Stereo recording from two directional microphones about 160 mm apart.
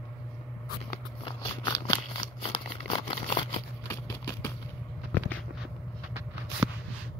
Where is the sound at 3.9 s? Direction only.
15° left (ahead or behind).